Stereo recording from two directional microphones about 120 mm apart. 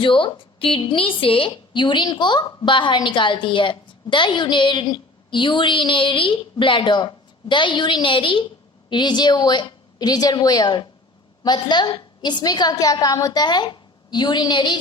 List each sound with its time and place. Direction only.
0.0 s a woman's voice: 45° left (ahead or behind)